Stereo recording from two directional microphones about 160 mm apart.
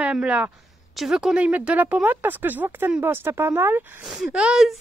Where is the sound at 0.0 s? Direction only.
5° right (ahead or behind).